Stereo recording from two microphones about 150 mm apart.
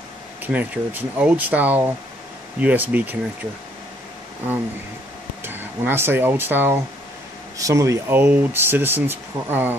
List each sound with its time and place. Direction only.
0.4 s speech: 10° right (ahead or behind)
5.4 s speech: 15° right (ahead or behind)